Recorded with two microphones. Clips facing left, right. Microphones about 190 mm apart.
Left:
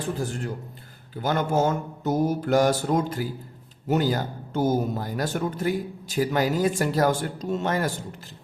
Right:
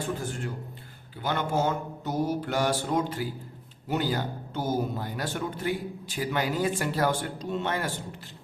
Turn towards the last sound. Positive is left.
turn(degrees=40)  # may be behind; listen again after turning